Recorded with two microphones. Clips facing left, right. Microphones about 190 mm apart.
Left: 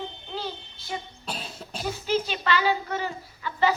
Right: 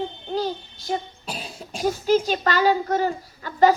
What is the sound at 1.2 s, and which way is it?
Cough, 5° right (ahead or behind).